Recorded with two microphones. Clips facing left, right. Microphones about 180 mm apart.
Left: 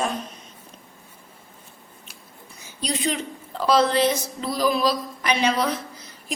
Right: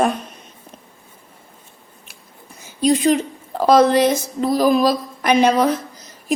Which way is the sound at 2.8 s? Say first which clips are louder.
Right 11 dB; 45° right (ahead or behind).